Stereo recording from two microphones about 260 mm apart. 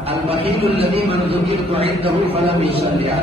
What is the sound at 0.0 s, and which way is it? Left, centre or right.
A man's voice, right.